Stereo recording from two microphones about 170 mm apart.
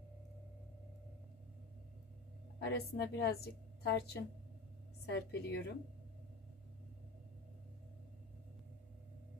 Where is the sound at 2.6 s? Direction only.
75° left (ahead or behind).